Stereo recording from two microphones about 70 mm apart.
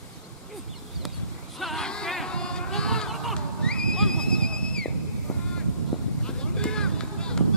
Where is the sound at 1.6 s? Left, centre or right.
Centre.